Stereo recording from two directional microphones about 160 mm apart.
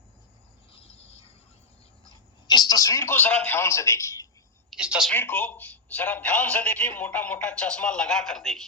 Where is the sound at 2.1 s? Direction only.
25° left (ahead or behind).